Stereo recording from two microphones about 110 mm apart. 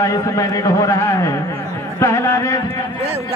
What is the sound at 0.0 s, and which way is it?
A man's voice, 30° left (ahead or behind).